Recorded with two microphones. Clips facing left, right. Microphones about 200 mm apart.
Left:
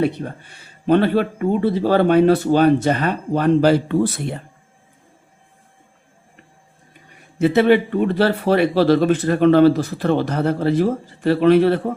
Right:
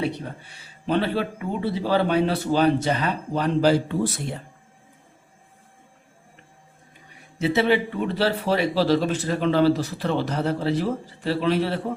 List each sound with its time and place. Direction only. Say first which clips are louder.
0.9 s speech: left 7 dB; 50° left (ahead or behind)
7.3 s speech: left 6 dB; 55° left (ahead or behind)